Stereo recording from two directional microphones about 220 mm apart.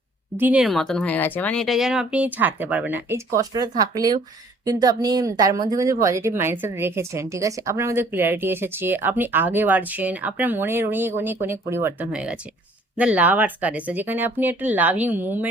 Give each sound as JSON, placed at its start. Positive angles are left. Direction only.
{"t": 0.3, "sound": "speech", "side_deg": -5}